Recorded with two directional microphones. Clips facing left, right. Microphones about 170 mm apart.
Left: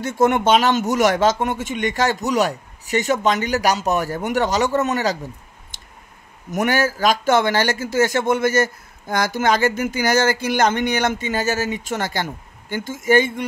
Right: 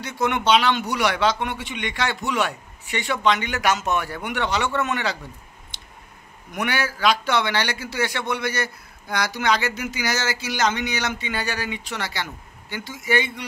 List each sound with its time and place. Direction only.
0.0 s a man's voice: 45° left (ahead or behind)